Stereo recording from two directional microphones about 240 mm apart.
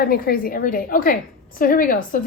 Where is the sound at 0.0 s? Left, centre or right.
Left.